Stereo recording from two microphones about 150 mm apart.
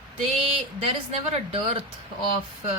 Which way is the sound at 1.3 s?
40° right (ahead or behind).